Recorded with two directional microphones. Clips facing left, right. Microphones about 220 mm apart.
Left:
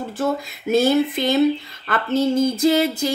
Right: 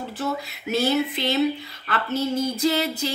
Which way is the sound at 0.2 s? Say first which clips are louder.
Left 6 dB; 45° left (ahead or behind).